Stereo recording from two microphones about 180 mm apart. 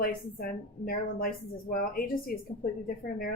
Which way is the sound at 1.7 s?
55° left (ahead or behind).